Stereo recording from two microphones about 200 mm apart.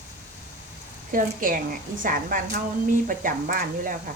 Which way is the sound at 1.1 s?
45° right (ahead or behind).